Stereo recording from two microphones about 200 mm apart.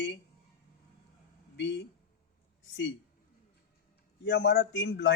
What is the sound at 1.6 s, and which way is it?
Speech, 60° left (ahead or behind).